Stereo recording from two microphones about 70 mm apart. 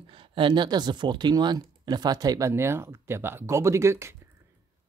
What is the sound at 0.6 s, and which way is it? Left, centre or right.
Speech, right.